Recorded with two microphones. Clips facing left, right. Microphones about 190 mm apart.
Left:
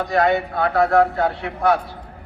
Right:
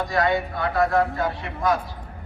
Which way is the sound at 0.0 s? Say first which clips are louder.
Left 4 dB; 65° left (ahead or behind).